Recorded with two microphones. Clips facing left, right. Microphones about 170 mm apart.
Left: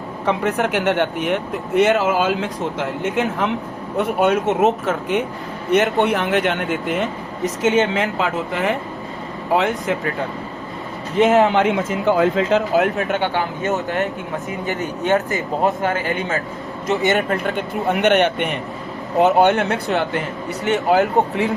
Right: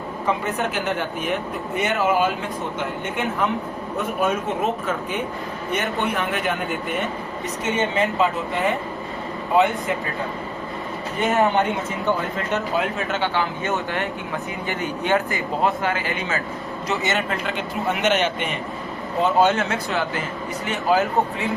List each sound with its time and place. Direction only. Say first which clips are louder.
0.3 s speech: left 5 dB; 75° left (ahead or behind)
3.9 s a man's voice: left 6 dB; 80° left
11.2 s a man's voice: left 5 dB; 90° left; by 21.4 s 65° left (ahead or behind)